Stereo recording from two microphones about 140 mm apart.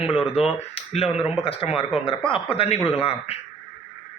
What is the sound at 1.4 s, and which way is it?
Speech, 45° left (ahead or behind).